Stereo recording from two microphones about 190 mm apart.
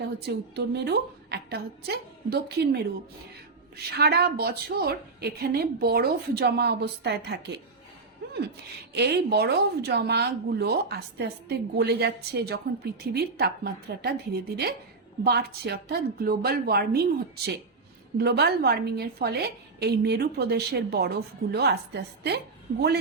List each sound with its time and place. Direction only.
0.2 s speech: 60° right (ahead or behind)
3.9 s speech: 60° right (ahead or behind)
8.2 s a sound: 60° right (ahead or behind)
8.9 s speech: 60° right (ahead or behind)
18.2 s speech: 60° right (ahead or behind)